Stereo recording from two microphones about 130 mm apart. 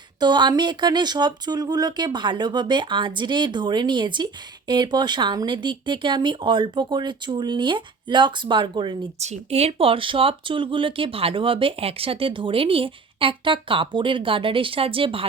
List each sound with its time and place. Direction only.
0.2 s speech: 35° right (ahead or behind)
9.2 s speech: 55° right (ahead or behind)